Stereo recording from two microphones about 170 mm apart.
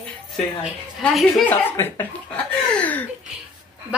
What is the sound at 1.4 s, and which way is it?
Speech, 10° left (ahead or behind).